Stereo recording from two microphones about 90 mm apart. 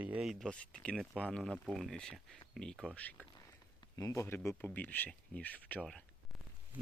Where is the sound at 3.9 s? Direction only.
35° left (ahead or behind).